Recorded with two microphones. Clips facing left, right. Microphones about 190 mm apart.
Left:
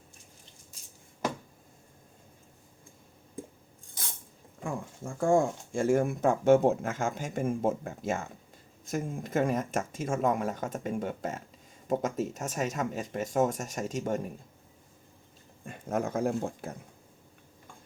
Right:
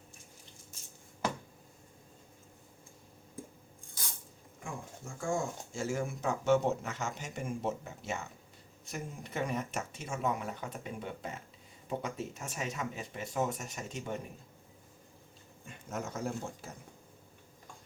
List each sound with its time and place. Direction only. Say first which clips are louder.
4.6 s speech: left 8 dB; 55° left (ahead or behind)
15.6 s speech: left 8 dB; 50° left (ahead or behind)